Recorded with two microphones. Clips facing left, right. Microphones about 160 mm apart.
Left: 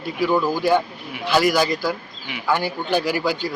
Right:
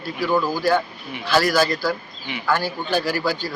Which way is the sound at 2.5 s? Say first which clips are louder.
Left 1 dB; 15° left (ahead or behind).